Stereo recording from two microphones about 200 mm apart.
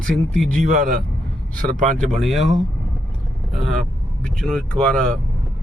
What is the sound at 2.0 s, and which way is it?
A man's voice, centre (ahead or behind).